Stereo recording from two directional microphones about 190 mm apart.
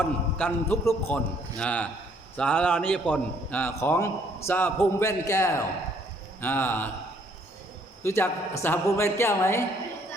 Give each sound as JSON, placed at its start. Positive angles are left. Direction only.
{"t": 0.0, "sound": "a man's voice", "side_deg": 10}
{"t": 8.0, "sound": "a man's voice", "side_deg": 15}